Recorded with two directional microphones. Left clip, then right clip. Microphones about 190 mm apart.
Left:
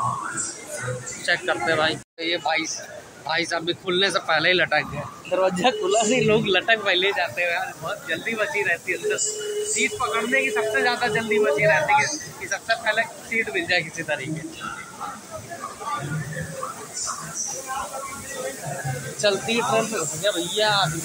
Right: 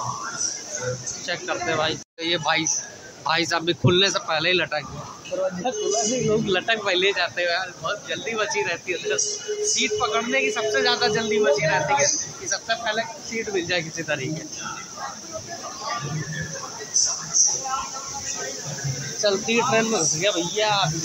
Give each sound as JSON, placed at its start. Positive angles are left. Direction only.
{"t": 1.2, "sound": "speech", "side_deg": -5}
{"t": 2.2, "sound": "speech", "side_deg": -25}
{"t": 5.6, "sound": "a man's voice", "side_deg": 10}
{"t": 6.3, "sound": "speech", "side_deg": -10}
{"t": 19.2, "sound": "speech", "side_deg": -15}